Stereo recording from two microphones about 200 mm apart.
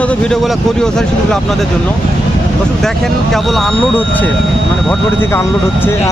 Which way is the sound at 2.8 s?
Centre (ahead or behind).